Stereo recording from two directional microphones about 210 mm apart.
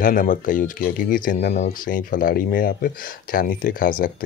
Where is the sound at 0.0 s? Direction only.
40° left (ahead or behind).